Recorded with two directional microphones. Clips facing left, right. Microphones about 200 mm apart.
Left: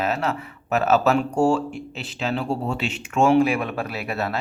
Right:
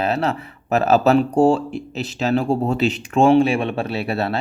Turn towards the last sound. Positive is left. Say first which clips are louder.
# right 5 dB
turn(degrees=-30)  # may be behind; listen again after turning